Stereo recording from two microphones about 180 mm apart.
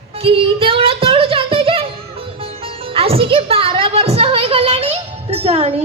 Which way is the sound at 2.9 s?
30° right (ahead or behind).